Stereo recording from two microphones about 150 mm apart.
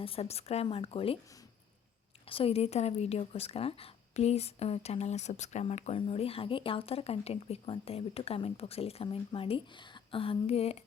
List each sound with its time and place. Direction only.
0.0 s speech: 40° left (ahead or behind)
2.2 s speech: 40° left (ahead or behind)